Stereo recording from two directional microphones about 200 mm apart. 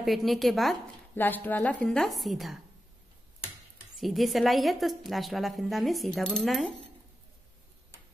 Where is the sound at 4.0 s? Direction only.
Centre (ahead or behind).